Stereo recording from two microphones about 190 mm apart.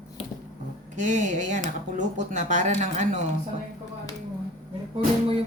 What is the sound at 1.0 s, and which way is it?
Speech, 40° right (ahead or behind).